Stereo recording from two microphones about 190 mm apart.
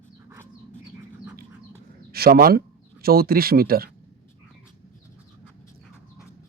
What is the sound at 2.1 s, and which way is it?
Speech, 50° right (ahead or behind).